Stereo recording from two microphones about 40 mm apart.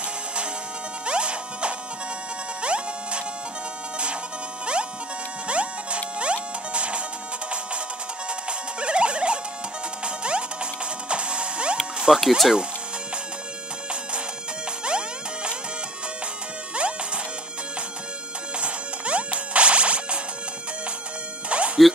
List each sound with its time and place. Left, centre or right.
1.0 s music: right
5.5 s music: right
8.3 s music: right
11.7 s music: centre
14.9 s music: right
16.7 s music: right
18.6 s music: right
21.5 s music: right